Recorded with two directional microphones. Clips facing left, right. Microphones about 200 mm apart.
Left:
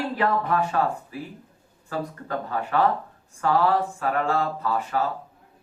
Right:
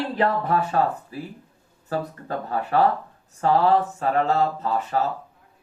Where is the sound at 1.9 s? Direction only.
35° right (ahead or behind).